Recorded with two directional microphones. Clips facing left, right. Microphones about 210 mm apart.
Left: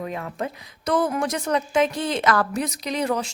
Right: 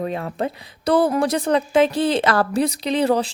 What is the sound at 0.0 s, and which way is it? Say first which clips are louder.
A woman's voice: right 5 dB; 35° right (ahead or behind).